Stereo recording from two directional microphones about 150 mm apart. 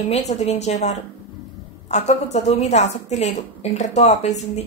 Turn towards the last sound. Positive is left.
turn(degrees=50)  # may be behind; listen again after turning